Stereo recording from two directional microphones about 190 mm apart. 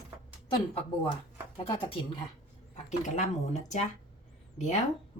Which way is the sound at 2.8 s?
40° left (ahead or behind).